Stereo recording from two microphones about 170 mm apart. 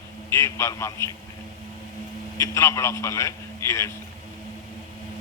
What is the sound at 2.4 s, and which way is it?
A man's voice, 15° left (ahead or behind).